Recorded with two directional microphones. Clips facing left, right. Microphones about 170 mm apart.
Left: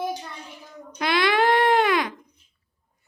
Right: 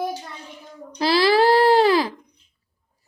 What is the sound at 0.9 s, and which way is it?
Speech, 30° right (ahead or behind).